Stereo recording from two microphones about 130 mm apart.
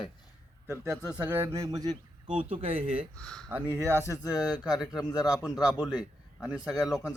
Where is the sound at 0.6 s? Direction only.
20° right (ahead or behind); by 3.0 s 50° right (ahead or behind).